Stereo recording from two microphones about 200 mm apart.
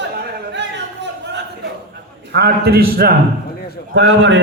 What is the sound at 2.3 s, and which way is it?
Speech, 55° right (ahead or behind).